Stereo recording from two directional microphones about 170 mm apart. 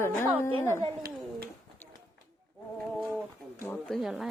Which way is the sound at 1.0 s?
60° right (ahead or behind).